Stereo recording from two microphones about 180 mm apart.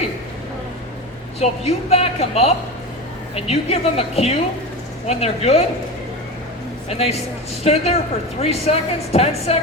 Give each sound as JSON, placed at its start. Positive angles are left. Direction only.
{"t": 1.4, "sound": "a woman's voice", "side_deg": 35}
{"t": 6.8, "sound": "a woman's voice", "side_deg": 35}